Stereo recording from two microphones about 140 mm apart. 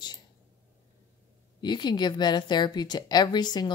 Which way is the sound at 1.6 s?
30° left (ahead or behind).